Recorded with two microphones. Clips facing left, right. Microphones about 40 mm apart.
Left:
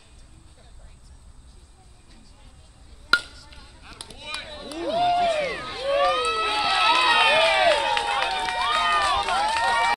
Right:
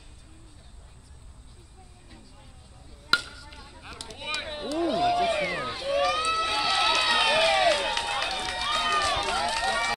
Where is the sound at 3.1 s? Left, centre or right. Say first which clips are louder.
Left 4 dB; centre.